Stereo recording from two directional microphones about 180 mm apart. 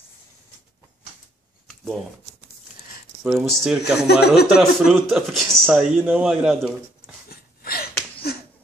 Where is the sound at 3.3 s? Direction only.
Centre (ahead or behind).